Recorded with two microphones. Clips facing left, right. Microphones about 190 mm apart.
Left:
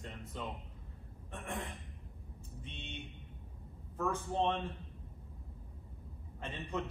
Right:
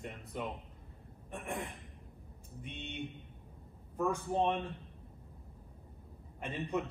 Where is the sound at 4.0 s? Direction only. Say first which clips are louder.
Right 2 dB; 15° right (ahead or behind).